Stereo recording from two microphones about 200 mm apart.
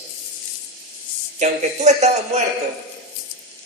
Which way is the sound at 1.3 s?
35° right (ahead or behind).